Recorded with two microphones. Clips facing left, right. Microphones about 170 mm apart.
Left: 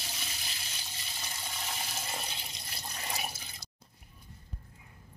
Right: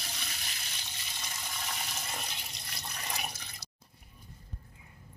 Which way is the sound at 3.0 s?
5° left (ahead or behind).